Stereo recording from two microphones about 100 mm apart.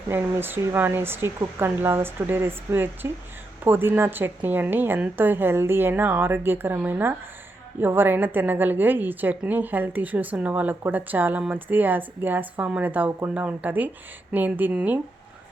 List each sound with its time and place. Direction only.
0.1 s a woman's voice: 20° right (ahead or behind)